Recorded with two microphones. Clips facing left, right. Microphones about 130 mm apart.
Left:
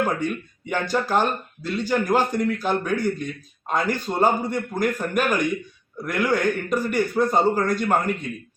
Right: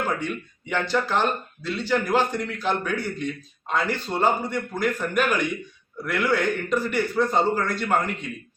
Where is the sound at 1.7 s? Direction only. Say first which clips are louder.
Left 1 dB; 10° left (ahead or behind).